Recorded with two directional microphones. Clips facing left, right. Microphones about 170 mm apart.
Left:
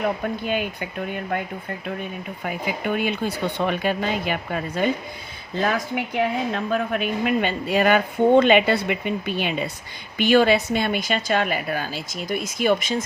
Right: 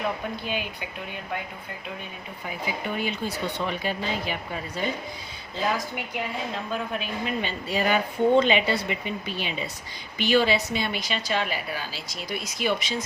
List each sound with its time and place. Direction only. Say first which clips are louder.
0.4 s a woman's voice: left 6 dB; 50° left (ahead or behind)
2.4 s a woman's voice: left 4 dB; 60° left (ahead or behind)